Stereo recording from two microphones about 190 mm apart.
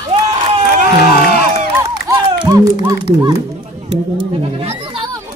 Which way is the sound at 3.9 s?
30° right (ahead or behind).